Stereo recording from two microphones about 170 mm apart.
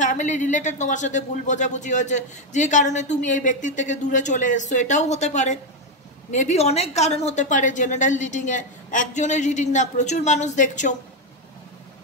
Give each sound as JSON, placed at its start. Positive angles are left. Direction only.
{"t": 0.0, "sound": "speech", "side_deg": 45}